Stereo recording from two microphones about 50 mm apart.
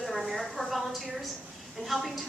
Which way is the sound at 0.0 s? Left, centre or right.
Centre.